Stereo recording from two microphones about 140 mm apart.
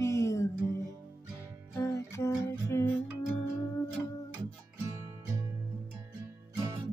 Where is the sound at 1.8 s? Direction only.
20° left (ahead or behind).